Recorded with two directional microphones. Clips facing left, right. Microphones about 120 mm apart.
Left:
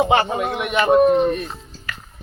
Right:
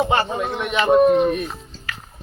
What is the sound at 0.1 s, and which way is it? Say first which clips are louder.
Speech: left 2 dB; 15° left (ahead or behind).